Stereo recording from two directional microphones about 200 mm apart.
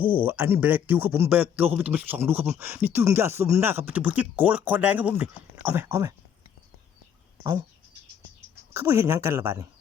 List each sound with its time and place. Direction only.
0.0 s a man's voice: 10° right (ahead or behind)
8.7 s a man's voice: 15° right (ahead or behind)